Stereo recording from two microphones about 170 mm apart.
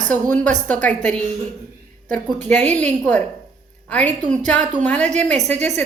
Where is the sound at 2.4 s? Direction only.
40° right (ahead or behind).